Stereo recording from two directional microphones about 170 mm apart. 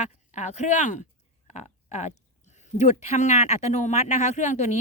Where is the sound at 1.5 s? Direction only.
40° left (ahead or behind).